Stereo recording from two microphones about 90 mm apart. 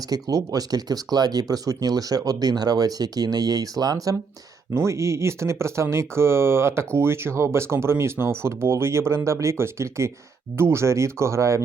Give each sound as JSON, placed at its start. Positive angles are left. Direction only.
{"t": 0.1, "sound": "speech", "side_deg": -45}